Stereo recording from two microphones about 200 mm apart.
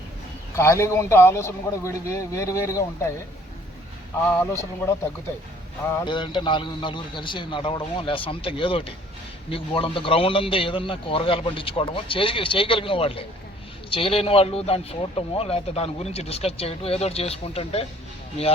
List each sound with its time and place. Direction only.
0.5 s a man's voice: 15° left (ahead or behind)
4.3 s a man's voice: 10° left (ahead or behind)
6.1 s speech: 25° left (ahead or behind)